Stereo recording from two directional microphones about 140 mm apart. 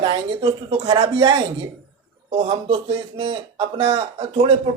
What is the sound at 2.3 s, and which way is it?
Speech, 45° right (ahead or behind).